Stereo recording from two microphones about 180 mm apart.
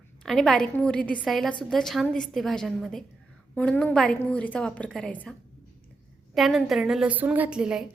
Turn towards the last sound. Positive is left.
turn(degrees=-5)  # may be behind; listen again after turning